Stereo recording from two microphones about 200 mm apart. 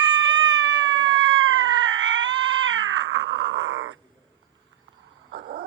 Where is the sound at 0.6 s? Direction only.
70° right (ahead or behind).